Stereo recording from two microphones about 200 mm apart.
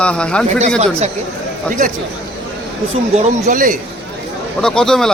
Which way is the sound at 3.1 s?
35° right (ahead or behind).